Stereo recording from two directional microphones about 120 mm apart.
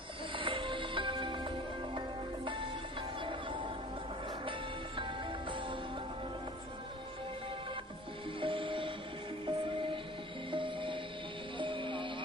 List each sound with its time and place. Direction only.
0.3 s music: 45° right (ahead or behind)
8.4 s music: 45° right (ahead or behind)